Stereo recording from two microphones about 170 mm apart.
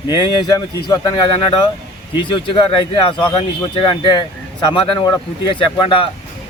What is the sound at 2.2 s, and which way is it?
Speech, 30° left (ahead or behind).